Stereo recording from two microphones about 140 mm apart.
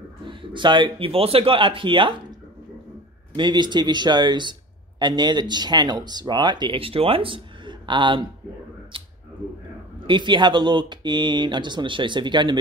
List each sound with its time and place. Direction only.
0.2 s speech: 35° right (ahead or behind)
3.3 s speech: 35° right (ahead or behind)
8.9 s a sound: 40° right (ahead or behind)
10.0 s speech: 35° right (ahead or behind)